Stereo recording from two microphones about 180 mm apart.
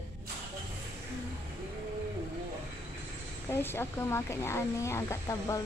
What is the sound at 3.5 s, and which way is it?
Speech, 15° left (ahead or behind).